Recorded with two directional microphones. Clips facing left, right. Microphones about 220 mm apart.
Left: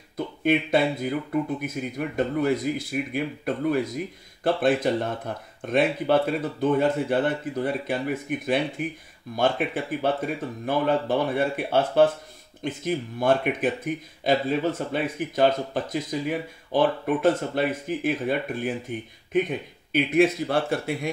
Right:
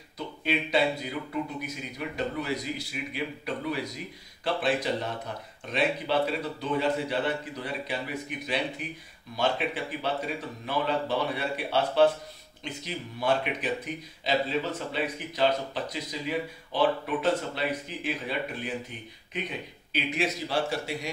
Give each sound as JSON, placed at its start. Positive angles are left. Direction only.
{"t": 0.4, "sound": "speech", "side_deg": 50}